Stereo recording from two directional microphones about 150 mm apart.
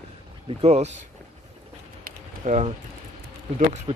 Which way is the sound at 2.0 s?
55° right (ahead or behind).